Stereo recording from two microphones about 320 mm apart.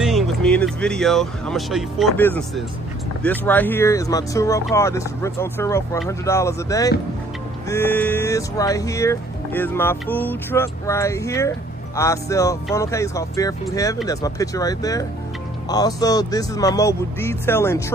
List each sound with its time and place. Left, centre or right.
0.0 s speech: centre